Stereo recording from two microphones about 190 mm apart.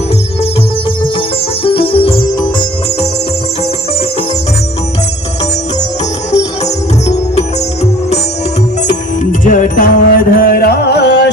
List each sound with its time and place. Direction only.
1.6 s music: 30° left (ahead or behind)
6.3 s music: 35° left (ahead or behind)
9.4 s music: 45° left (ahead or behind); by 11.3 s 60° left (ahead or behind)